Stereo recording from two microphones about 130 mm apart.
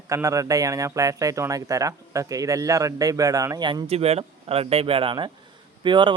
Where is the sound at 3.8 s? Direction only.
50° right (ahead or behind).